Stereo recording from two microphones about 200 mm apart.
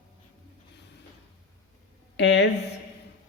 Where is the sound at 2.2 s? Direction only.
65° left (ahead or behind).